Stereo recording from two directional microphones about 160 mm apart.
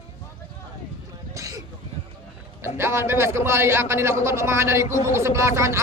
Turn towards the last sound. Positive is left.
turn(degrees=-15)  # may be behind; listen again after turning